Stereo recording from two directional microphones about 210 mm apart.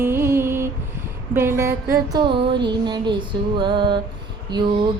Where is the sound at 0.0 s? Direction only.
10° right (ahead or behind).